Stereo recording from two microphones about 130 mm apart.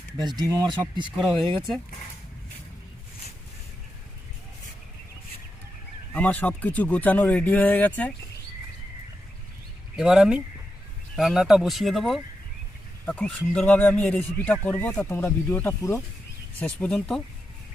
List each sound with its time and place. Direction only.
0.2 s speech: 30° right (ahead or behind)
1.1 s speech: centre (ahead or behind)
6.1 s speech: 10° left (ahead or behind)
9.9 s speech: 5° right (ahead or behind)
13.1 s speech: 10° left (ahead or behind)
16.6 s speech: 10° left (ahead or behind)